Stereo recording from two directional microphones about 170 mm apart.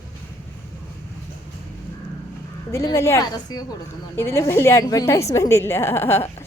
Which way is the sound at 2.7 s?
15° left (ahead or behind).